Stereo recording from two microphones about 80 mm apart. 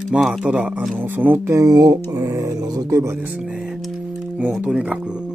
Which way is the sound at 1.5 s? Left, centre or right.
Right.